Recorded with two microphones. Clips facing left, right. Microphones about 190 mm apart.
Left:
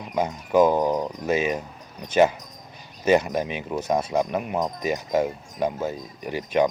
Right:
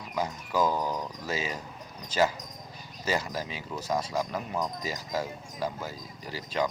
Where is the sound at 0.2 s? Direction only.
20° left (ahead or behind).